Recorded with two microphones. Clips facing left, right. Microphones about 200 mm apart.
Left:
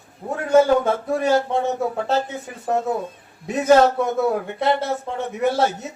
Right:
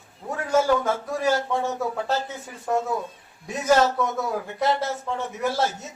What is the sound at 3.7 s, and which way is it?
A man's voice, 60° left (ahead or behind).